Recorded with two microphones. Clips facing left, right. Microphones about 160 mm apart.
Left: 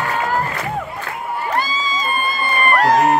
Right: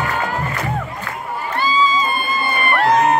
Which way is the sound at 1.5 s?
40° left (ahead or behind).